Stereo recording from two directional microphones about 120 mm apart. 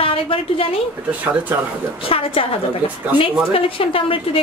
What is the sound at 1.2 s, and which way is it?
Speech, 10° right (ahead or behind).